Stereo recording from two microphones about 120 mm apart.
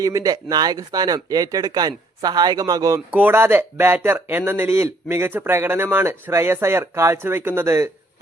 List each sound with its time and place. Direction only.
0.0 s speech: 30° right (ahead or behind)
3.1 s speech: 15° right (ahead or behind)